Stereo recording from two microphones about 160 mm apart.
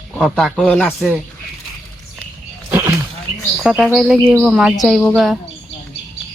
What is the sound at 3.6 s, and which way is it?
Speech, 5° right (ahead or behind).